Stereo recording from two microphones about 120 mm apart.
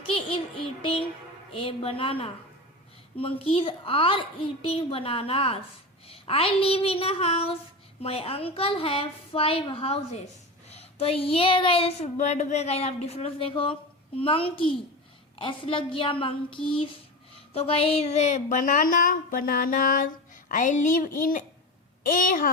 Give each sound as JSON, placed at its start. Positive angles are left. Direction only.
{"t": 0.0, "sound": "child singing", "side_deg": 50}
{"t": 1.5, "sound": "a child's voice", "side_deg": 50}
{"t": 12.1, "sound": "a child's voice", "side_deg": 75}